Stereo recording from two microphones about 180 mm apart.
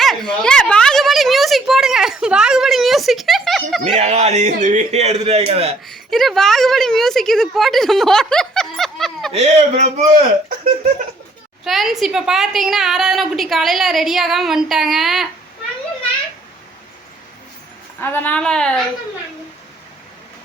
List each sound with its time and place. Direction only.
0.0 s a sound: centre (ahead or behind)
4.0 s a man's voice: 40° right (ahead or behind)
5.9 s a woman's voice: centre (ahead or behind)
9.3 s a man's voice: 35° right (ahead or behind)
11.6 s a woman's voice: centre (ahead or behind)
18.0 s a woman's voice: 10° left (ahead or behind)